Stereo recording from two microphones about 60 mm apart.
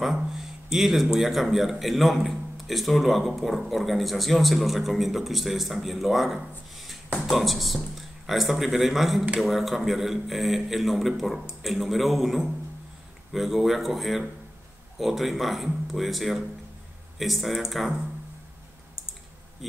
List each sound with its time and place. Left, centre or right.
0.0 s speech: centre